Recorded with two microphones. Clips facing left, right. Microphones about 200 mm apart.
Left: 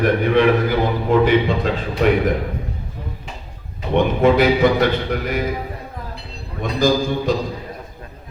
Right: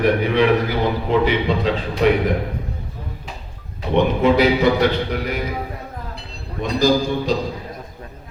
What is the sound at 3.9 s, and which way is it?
A man's voice, 50° left (ahead or behind).